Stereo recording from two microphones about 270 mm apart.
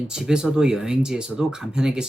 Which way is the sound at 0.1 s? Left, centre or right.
Centre.